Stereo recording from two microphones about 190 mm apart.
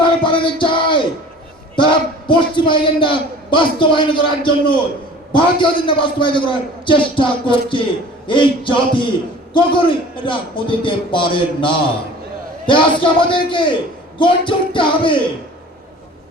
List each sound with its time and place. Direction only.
0.0 s music: 25° left (ahead or behind)
1.7 s a man's voice: 25° left (ahead or behind)